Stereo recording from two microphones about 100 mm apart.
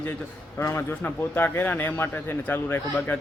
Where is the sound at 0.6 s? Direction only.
25° left (ahead or behind).